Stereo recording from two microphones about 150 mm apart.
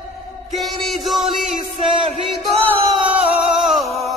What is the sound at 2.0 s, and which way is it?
Music, 35° right (ahead or behind).